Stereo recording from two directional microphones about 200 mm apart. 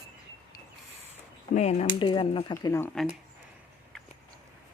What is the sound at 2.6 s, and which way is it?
Speech, 15° left (ahead or behind).